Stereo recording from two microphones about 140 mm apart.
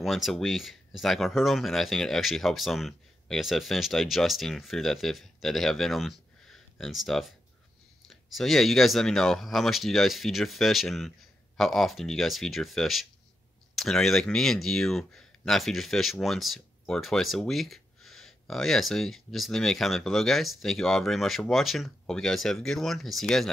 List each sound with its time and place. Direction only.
0.0 s speech: centre (ahead or behind)